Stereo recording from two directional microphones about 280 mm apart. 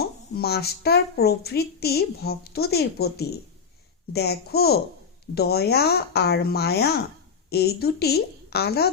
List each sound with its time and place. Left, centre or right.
0.0 s a woman's voice: left